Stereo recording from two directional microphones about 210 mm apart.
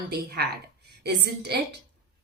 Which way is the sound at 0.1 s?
50° right (ahead or behind).